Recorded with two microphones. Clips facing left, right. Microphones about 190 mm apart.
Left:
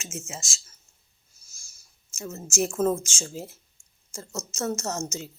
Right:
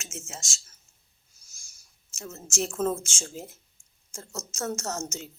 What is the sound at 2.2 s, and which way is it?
Speech, 10° left (ahead or behind).